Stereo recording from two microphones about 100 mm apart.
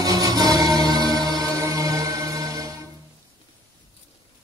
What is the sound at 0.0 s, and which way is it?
Music, 40° right (ahead or behind).